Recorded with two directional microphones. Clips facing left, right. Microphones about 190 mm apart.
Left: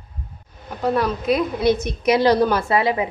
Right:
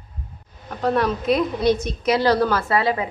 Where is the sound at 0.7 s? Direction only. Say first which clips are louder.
Even; 5° left (ahead or behind).